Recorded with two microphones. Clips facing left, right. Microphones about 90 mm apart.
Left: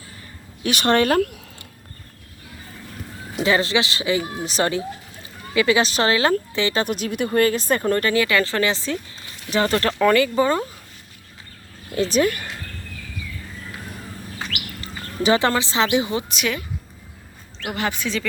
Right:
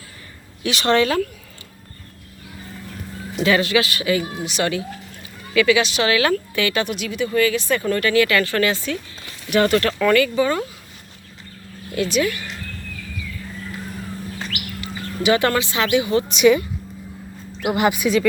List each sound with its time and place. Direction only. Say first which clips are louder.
0.6 s a woman's voice: right 1 dB; 45° left (ahead or behind)
3.4 s speech: right 2 dB; 25° left (ahead or behind)
6.8 s speech: even; 40° left (ahead or behind)
11.9 s speech: left 1 dB; 35° left (ahead or behind)
14.8 s speech: even; 30° left (ahead or behind)
16.3 s speech: right 11 dB; centre (ahead or behind)
17.6 s speech: right 7 dB; 15° right (ahead or behind)